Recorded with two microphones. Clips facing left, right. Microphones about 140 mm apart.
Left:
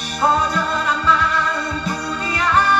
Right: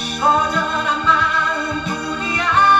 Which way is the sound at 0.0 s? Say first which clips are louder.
Right 1 dB; 35° left (ahead or behind).